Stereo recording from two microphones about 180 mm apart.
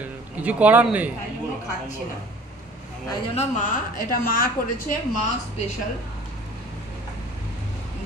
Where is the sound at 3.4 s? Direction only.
45° left (ahead or behind).